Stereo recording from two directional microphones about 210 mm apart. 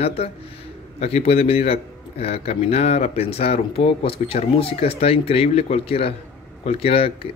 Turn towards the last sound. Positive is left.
turn(degrees=25)  # may be behind; listen again after turning